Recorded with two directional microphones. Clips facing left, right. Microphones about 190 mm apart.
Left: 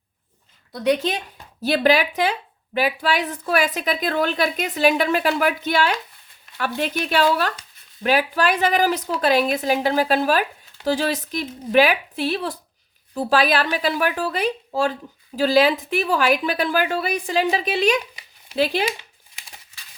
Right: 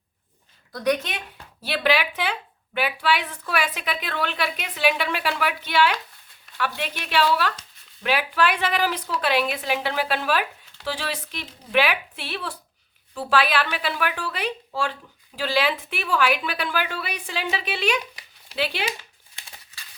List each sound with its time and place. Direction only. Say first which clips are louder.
0.7 s a woman's voice: left 4 dB; 30° left (ahead or behind)
1.6 s a woman's voice: left 5 dB; 40° left (ahead or behind)